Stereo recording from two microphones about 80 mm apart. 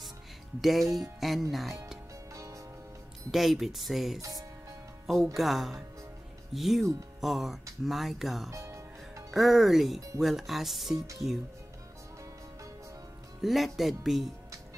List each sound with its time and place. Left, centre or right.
0.6 s speech: centre
2.3 s music: right
3.3 s speech: centre
8.5 s music: right
9.3 s speech: centre
13.4 s speech: centre